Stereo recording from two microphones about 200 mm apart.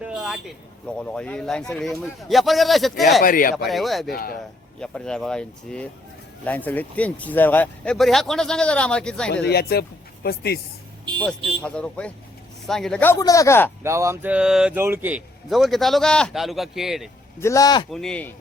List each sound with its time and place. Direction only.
0.0 s speech: 5° right (ahead or behind)
3.2 s speech: 45° left (ahead or behind)
3.7 s speech: centre (ahead or behind)
4.1 s speech: 45° left (ahead or behind)
4.8 s speech: 5° left (ahead or behind)
9.3 s speech: 55° left (ahead or behind)
11.4 s speech: 5° left (ahead or behind)
13.8 s speech: 15° right (ahead or behind)
17.4 s speech: 15° left (ahead or behind)
17.9 s speech: 5° left (ahead or behind)